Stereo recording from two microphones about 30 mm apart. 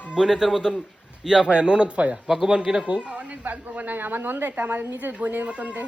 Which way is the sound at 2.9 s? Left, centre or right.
Right.